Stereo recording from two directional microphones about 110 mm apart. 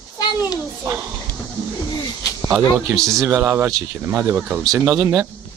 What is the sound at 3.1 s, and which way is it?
Speech, 20° right (ahead or behind).